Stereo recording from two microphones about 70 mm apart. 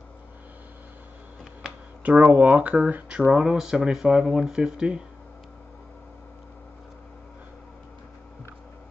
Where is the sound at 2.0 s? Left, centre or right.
Right.